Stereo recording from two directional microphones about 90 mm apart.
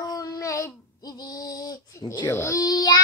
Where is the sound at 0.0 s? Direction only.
40° left (ahead or behind).